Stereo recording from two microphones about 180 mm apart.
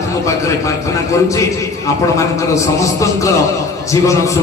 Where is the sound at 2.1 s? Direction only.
15° left (ahead or behind).